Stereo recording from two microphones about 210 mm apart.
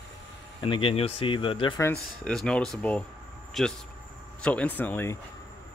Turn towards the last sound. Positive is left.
turn(degrees=10)  # may be behind; listen again after turning